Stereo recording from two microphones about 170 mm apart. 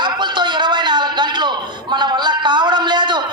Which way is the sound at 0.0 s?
25° right (ahead or behind).